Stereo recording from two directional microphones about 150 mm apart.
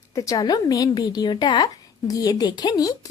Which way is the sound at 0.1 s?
20° left (ahead or behind).